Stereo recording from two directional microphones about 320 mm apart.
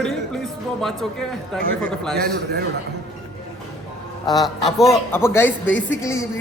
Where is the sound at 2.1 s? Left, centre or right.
Right.